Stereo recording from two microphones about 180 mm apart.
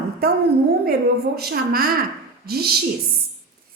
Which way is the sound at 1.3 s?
60° right (ahead or behind).